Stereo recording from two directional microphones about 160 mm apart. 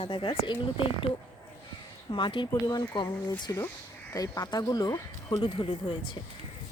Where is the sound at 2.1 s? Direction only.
30° left (ahead or behind).